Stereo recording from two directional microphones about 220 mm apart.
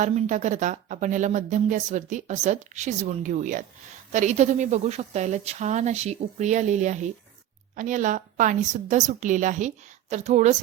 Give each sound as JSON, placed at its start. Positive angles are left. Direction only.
{"t": 0.0, "sound": "speech", "side_deg": -35}